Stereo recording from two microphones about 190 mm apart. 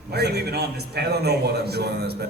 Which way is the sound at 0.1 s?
60° right (ahead or behind).